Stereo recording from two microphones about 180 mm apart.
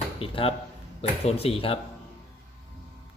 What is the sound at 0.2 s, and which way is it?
Speech, 30° left (ahead or behind).